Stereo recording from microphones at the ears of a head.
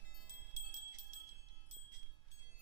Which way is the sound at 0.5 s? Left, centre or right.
Right.